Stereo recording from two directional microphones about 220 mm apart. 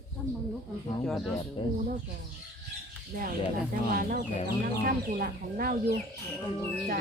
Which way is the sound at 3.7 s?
40° right (ahead or behind).